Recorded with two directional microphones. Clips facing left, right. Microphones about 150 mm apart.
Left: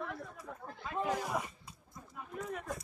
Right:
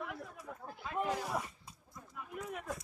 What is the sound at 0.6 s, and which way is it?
Chatter, 5° right (ahead or behind).